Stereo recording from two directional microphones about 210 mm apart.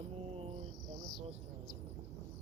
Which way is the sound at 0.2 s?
30° right (ahead or behind).